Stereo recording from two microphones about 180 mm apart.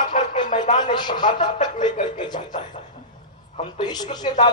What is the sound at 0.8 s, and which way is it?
A man's voice, 25° left (ahead or behind).